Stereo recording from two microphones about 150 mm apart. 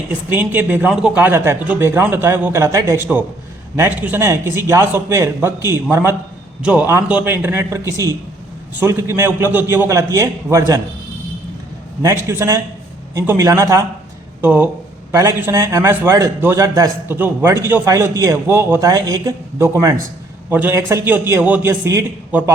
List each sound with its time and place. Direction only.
0.1 s speech: 10° right (ahead or behind)
12.0 s a man's voice: 15° right (ahead or behind)